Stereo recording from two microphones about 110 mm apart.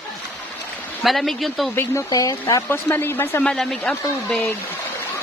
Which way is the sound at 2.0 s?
35° left (ahead or behind).